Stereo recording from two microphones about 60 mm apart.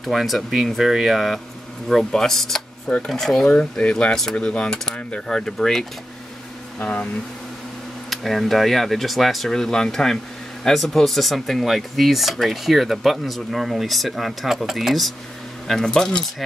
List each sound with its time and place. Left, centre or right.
0.0 s speech: centre
3.0 s mechanisms: centre
6.8 s speech: left
8.1 s speech: centre
15.7 s mechanisms: centre